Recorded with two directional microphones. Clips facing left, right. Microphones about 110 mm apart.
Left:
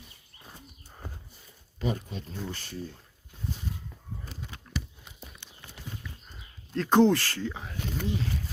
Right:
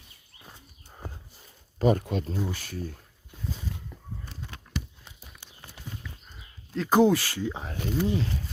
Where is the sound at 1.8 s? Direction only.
50° right (ahead or behind).